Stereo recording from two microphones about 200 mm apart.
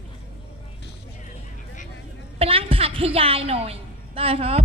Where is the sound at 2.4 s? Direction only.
30° right (ahead or behind).